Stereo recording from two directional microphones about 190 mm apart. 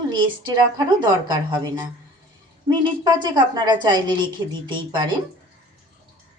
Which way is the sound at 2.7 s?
20° right (ahead or behind).